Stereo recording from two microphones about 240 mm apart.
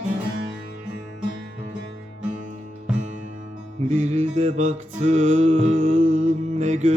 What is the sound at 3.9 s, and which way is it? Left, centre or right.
Music, right.